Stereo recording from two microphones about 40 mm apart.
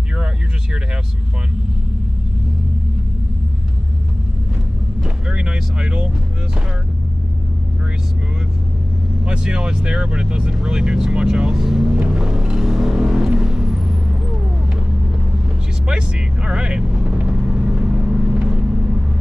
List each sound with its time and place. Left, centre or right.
5.0 s vehicle: right
9.2 s vehicle: right
15.9 s vehicle: right